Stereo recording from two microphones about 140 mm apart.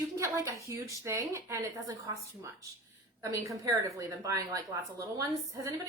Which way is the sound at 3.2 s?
20° right (ahead or behind).